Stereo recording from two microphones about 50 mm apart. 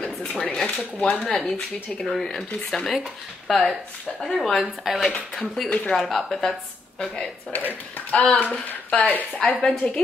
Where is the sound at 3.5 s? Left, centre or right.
Centre.